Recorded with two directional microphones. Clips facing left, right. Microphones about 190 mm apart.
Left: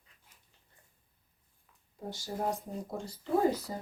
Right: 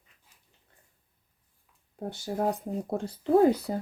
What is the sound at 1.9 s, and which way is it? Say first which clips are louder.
Speech: right 6 dB; 60° right (ahead or behind).